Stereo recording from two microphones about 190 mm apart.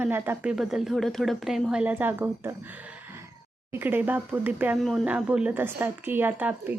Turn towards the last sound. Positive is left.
turn(degrees=-10)  # may be behind; listen again after turning